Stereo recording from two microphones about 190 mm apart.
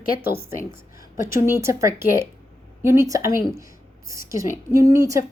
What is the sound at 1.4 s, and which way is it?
Speech, 15° right (ahead or behind).